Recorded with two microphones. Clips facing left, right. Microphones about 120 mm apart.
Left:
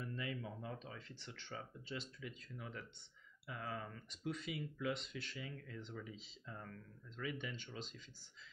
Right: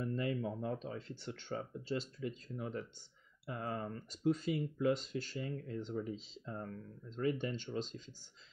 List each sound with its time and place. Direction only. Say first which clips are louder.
0.0 s speech: right 9 dB; 45° right (ahead or behind)